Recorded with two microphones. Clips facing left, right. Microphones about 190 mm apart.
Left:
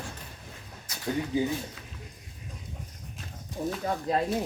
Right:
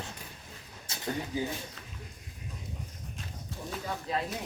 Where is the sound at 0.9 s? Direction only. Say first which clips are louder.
Right 1 dB; 25° right (ahead or behind).